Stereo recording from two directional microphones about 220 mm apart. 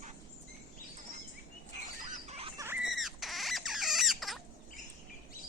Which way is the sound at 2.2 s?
30° right (ahead or behind).